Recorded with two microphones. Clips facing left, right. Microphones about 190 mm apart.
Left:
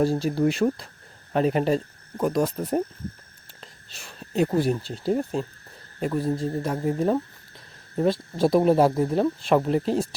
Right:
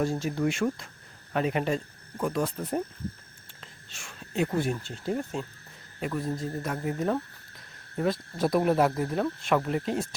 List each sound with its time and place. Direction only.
0.0 s speech: 35° left (ahead or behind)
3.8 s speech: 35° left (ahead or behind)